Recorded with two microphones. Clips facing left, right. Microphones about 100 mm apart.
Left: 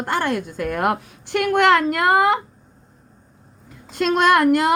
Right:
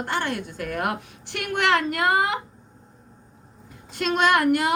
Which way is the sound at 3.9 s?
45° left (ahead or behind).